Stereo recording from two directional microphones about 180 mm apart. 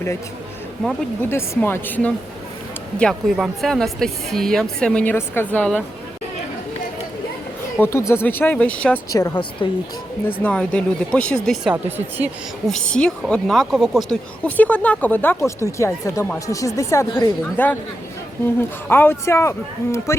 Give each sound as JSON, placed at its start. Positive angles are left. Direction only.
{"t": 1.2, "sound": "speech", "side_deg": 10}
{"t": 7.8, "sound": "speech", "side_deg": 15}
{"t": 9.0, "sound": "speech", "side_deg": 20}
{"t": 10.4, "sound": "speech", "side_deg": 5}
{"t": 12.6, "sound": "speech", "side_deg": 5}
{"t": 18.9, "sound": "speech", "side_deg": 10}